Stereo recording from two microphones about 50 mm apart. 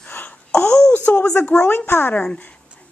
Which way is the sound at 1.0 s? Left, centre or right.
Left.